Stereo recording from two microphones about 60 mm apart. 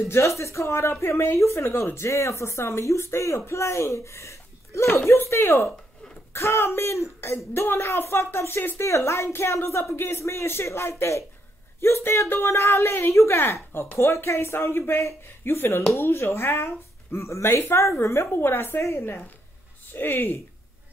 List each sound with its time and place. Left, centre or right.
0.1 s a woman's voice: left
18.8 s a woman's voice: left
19.9 s speech: left